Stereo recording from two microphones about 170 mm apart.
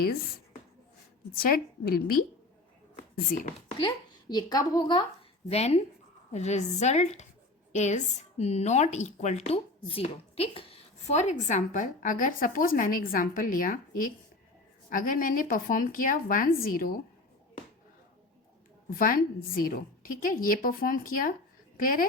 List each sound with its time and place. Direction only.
1.4 s a woman's voice: 60° left (ahead or behind)
3.2 s speech: 50° left (ahead or behind)
3.8 s speech: 25° left (ahead or behind)
5.5 s a woman's voice: 40° left (ahead or behind); by 17.0 s 60° left (ahead or behind)
18.9 s a woman's voice: 55° left (ahead or behind)